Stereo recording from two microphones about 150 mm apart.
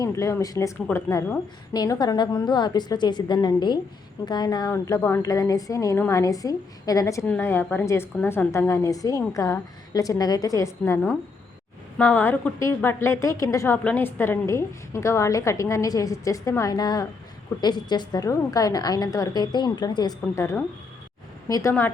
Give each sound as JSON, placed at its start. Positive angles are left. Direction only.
{"t": 0.0, "sound": "a woman's voice", "side_deg": 20}
{"t": 4.7, "sound": "a woman's voice", "side_deg": 15}